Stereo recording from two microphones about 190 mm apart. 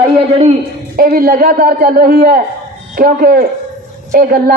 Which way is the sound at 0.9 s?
50° right (ahead or behind).